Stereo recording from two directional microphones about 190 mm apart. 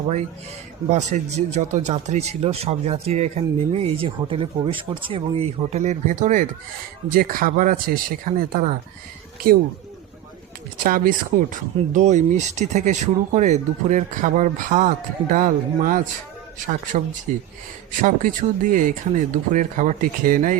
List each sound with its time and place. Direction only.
0.9 s speech: 35° right (ahead or behind)
10.8 s speech: 45° right (ahead or behind)